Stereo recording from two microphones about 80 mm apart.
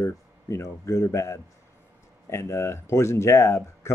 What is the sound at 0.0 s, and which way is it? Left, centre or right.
Speech, left.